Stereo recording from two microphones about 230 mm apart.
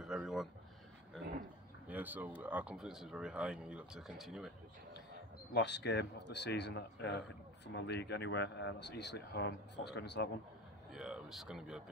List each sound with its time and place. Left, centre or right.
0.0 s a sound: centre
1.9 s speech: centre
5.5 s speech: left
10.9 s speech: centre